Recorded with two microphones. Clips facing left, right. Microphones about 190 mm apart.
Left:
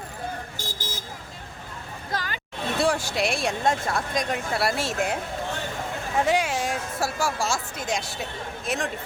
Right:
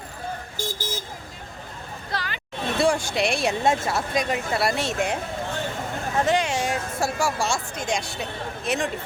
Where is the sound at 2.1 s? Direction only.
45° left (ahead or behind).